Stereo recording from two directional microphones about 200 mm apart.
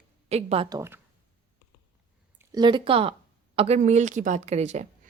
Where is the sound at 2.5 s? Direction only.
25° right (ahead or behind).